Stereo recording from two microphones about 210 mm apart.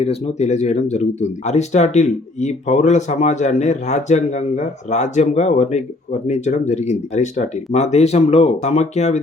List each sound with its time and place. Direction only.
0.0 s speech: 30° left (ahead or behind)